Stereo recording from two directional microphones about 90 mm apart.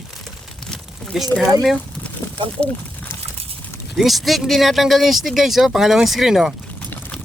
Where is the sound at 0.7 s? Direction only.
Centre (ahead or behind).